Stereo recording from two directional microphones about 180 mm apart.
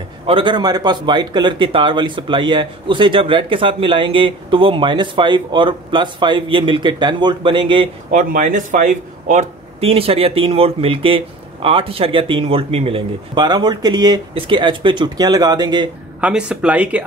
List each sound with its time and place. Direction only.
0.3 s a man's voice: 25° right (ahead or behind)
8.1 s a man's voice: 45° right (ahead or behind); by 15.9 s 25° right (ahead or behind)
16.2 s speech: 5° right (ahead or behind)